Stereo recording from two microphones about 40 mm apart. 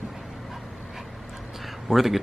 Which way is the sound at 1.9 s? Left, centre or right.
Centre.